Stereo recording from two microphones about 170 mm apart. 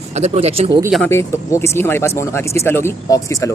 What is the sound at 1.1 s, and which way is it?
Speech, 15° left (ahead or behind).